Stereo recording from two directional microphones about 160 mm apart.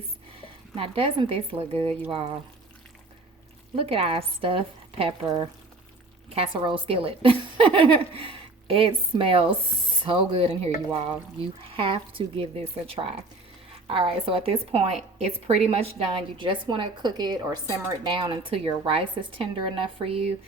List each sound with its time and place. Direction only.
0.8 s a woman's voice: 35° right (ahead or behind)
3.8 s a woman's voice: 35° right (ahead or behind)
11.7 s a woman's voice: 35° right (ahead or behind)